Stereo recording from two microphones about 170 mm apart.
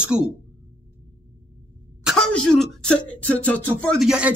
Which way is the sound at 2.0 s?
Centre (ahead or behind).